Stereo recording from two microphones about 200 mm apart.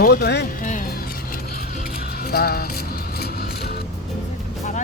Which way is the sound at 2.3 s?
50° left (ahead or behind).